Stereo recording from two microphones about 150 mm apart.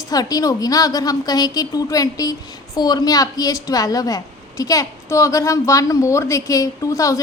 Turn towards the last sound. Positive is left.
turn(degrees=20)  # may be behind; listen again after turning